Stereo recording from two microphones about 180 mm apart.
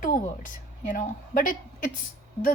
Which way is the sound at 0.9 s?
50° left (ahead or behind).